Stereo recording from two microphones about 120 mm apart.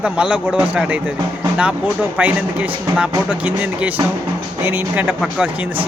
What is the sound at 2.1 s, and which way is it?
Speech, 10° right (ahead or behind).